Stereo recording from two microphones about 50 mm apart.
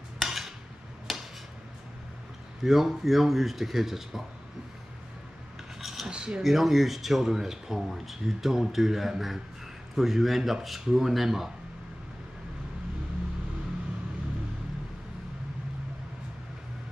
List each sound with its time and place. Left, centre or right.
0.2 s a sound: centre
2.6 s speech: centre
5.8 s cutlery: centre
6.0 s speech: centre
6.4 s speech: centre